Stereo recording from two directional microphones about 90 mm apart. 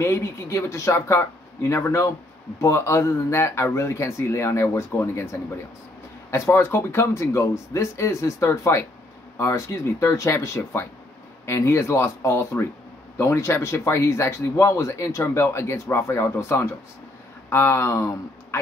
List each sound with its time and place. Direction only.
0.0 s a man's voice: 30° left (ahead or behind)